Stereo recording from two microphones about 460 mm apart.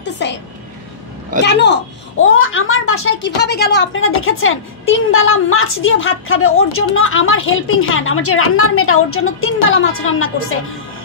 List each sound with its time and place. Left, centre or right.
0.0 s a woman's voice: left
1.4 s a child's voice: left